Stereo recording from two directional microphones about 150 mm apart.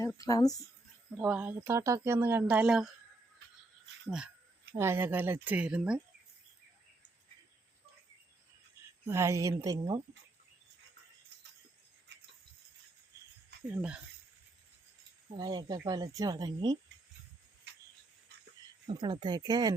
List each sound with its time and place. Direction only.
0.0 s speech: 20° left (ahead or behind)
1.1 s speech: 10° right (ahead or behind)
4.7 s speech: 15° right (ahead or behind)
9.0 s speech: 20° right (ahead or behind)
13.7 s speech: 10° right (ahead or behind)
15.4 s speech: 25° right (ahead or behind)
18.9 s speech: 25° right (ahead or behind)